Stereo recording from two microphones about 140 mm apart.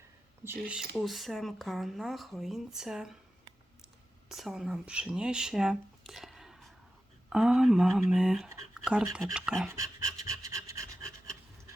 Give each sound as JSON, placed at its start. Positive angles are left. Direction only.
{"t": 0.4, "sound": "speech", "side_deg": -10}
{"t": 4.3, "sound": "speech", "side_deg": 0}
{"t": 8.7, "sound": "a sound", "side_deg": -5}
{"t": 9.1, "sound": "speech", "side_deg": -5}
{"t": 9.6, "sound": "pant", "side_deg": -20}